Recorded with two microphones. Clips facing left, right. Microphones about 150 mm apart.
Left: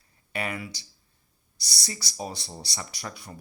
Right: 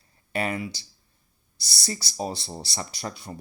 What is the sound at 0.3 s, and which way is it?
Speech, 30° right (ahead or behind).